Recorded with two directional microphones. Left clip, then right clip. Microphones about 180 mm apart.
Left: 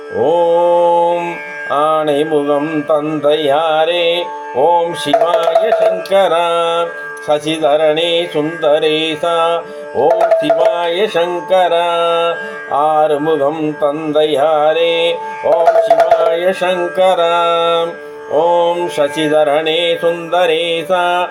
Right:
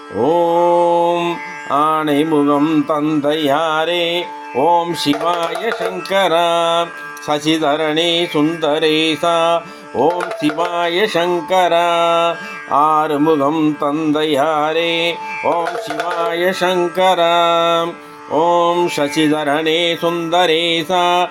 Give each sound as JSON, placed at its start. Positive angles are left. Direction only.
{"t": 0.3, "sound": "mantra", "side_deg": -35}
{"t": 1.7, "sound": "a man's voice", "side_deg": -40}